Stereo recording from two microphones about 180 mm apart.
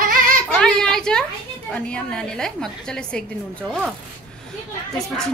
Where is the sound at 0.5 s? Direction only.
5° left (ahead or behind).